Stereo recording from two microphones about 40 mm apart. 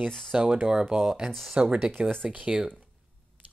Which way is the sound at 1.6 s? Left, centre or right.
Right.